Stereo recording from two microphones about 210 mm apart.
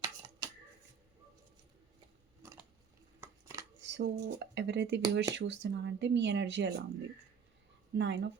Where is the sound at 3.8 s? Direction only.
55° right (ahead or behind).